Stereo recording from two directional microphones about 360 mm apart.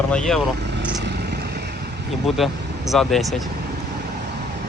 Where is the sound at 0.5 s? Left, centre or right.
Right.